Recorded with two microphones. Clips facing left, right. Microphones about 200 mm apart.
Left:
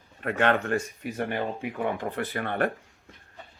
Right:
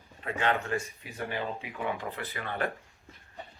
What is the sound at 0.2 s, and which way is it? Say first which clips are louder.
Speech: left 5 dB; 65° left (ahead or behind).